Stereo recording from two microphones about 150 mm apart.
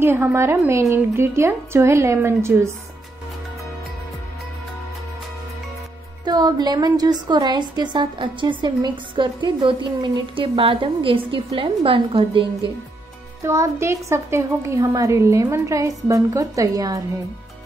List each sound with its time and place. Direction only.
0.0 s a woman's voice: 15° right (ahead or behind)
6.2 s a woman's voice: 30° right (ahead or behind)
13.4 s a woman's voice: 20° right (ahead or behind)